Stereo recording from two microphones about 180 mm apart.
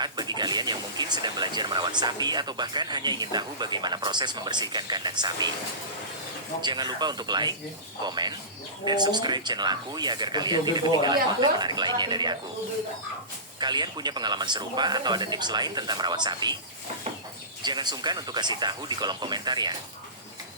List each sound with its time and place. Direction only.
0.0 s speech: 25° right (ahead or behind)
6.6 s speech: 25° right (ahead or behind)
13.6 s speech: 25° right (ahead or behind)
17.6 s speech: 25° right (ahead or behind)